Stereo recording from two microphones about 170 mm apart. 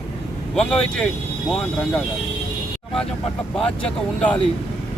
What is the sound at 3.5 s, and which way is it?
Speech, 5° left (ahead or behind).